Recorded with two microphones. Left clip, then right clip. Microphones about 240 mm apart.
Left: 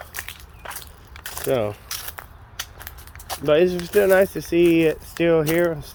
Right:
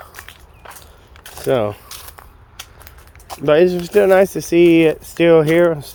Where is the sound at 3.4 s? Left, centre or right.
Right.